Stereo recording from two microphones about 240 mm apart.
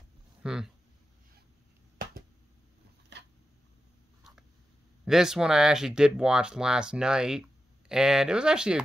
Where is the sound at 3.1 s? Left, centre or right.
Right.